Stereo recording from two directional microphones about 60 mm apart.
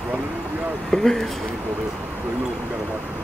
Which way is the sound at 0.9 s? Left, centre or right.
Centre.